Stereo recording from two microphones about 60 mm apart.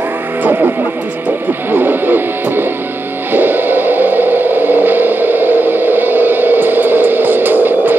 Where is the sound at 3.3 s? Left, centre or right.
Right.